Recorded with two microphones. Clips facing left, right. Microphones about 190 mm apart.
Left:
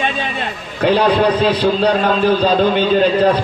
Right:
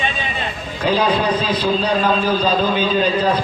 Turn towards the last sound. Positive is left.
turn(degrees=65)  # may be behind; listen again after turning